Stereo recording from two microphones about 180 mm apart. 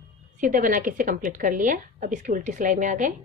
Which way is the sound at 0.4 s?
45° right (ahead or behind).